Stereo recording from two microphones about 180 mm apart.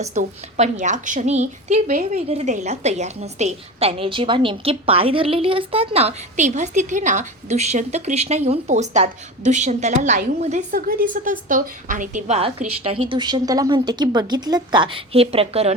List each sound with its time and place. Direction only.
0.1 s a woman's voice: 40° right (ahead or behind)
2.1 s a woman's voice: 35° right (ahead or behind)
10.7 s a woman's voice: 55° right (ahead or behind); by 15.7 s 35° right (ahead or behind)